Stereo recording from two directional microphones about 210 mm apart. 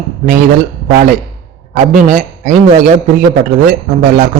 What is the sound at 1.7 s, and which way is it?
Speech, 35° right (ahead or behind).